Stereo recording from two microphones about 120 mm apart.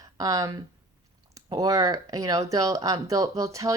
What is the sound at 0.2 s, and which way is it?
Speech, 30° right (ahead or behind).